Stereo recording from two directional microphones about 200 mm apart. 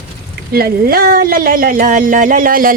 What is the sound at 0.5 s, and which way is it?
Speech, 50° right (ahead or behind).